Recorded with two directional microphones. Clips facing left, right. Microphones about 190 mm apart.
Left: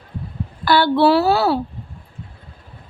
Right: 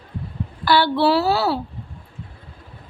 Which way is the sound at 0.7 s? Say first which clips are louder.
Left 3 dB; 50° left (ahead or behind).